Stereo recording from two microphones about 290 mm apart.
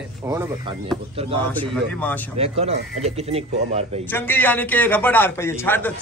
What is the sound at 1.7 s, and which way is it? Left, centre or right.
Speech, centre.